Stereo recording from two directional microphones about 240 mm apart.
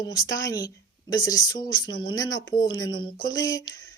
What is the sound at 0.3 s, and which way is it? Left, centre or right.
Speech, centre.